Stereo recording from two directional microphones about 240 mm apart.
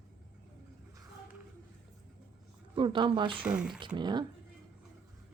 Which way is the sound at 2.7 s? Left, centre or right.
Centre.